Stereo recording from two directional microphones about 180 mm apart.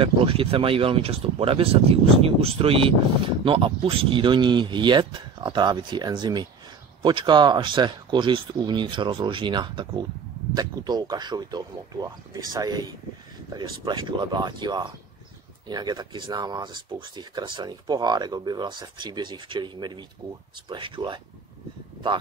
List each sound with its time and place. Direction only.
0.0 s speech: 30° right (ahead or behind)